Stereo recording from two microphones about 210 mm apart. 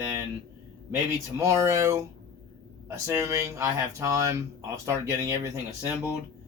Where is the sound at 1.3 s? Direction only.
15° right (ahead or behind).